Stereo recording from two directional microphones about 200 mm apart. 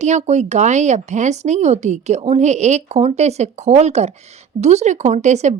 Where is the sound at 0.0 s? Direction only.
35° right (ahead or behind).